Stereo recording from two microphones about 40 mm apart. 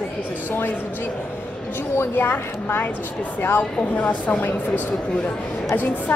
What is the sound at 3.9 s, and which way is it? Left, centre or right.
Speech, left.